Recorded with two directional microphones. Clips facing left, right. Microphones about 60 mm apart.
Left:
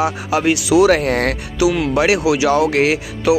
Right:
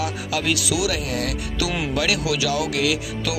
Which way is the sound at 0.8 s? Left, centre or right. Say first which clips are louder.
Left 10 dB; left.